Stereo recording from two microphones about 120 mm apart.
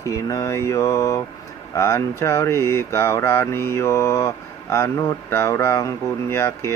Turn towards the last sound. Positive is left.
turn(degrees=20)  # may be behind; listen again after turning